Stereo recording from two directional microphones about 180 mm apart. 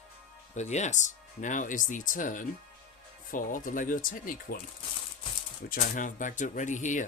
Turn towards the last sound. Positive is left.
turn(degrees=45)  # may be behind; listen again after turning